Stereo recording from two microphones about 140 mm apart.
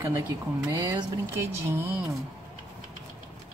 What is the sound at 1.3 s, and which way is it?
Speech, 15° right (ahead or behind).